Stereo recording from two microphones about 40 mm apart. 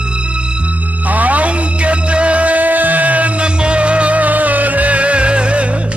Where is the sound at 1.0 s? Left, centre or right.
Right.